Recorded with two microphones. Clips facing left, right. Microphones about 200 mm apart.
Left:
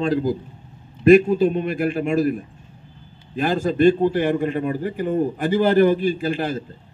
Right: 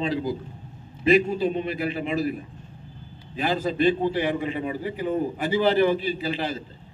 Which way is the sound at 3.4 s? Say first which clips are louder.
Left 5 dB; 50° left (ahead or behind).